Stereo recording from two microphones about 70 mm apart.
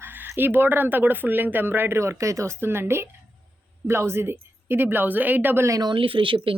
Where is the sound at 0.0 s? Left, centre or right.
Right.